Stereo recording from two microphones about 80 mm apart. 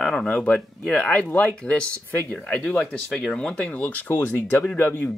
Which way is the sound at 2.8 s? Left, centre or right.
Centre.